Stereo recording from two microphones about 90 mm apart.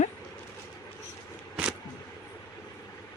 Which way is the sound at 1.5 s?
10° right (ahead or behind).